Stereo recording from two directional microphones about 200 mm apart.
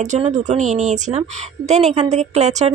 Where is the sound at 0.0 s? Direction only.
35° right (ahead or behind).